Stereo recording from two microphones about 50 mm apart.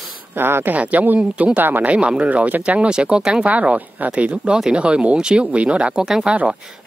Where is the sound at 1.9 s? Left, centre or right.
Right.